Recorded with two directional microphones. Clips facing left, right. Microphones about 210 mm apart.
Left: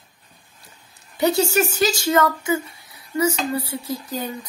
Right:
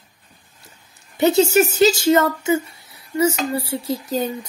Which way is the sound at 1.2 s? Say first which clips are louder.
Right 4 dB; 20° right (ahead or behind).